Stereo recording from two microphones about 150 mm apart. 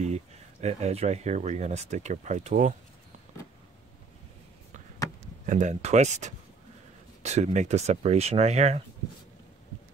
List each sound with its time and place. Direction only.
0.0 s speech: 45° right (ahead or behind)
5.5 s speech: 55° right (ahead or behind)